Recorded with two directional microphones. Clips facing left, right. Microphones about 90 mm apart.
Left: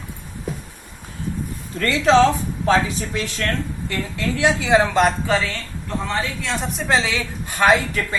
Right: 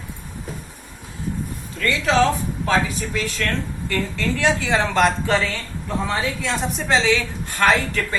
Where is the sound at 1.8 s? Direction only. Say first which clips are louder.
Left 4 dB; 35° left (ahead or behind); by 5.0 s 15° left (ahead or behind).